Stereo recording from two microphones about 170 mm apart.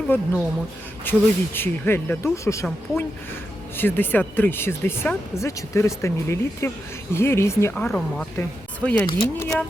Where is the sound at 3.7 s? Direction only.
10° left (ahead or behind).